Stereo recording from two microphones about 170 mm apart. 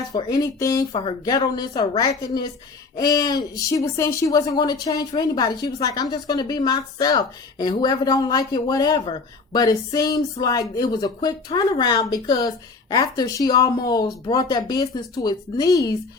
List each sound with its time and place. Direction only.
0.2 s speech: 20° left (ahead or behind)